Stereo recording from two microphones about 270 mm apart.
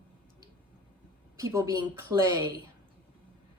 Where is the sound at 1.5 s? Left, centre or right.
Centre.